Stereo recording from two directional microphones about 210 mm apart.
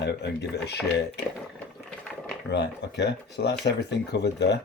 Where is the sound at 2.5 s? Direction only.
55° left (ahead or behind).